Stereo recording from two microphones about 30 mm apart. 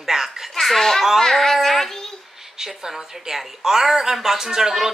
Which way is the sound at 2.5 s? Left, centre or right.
Centre.